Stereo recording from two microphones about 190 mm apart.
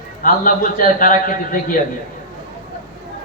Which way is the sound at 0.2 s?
45° left (ahead or behind).